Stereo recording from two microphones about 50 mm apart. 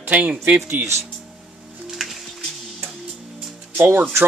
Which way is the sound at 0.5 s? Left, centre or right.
Right.